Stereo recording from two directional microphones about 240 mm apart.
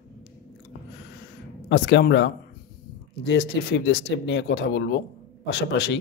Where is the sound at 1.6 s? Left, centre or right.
Left.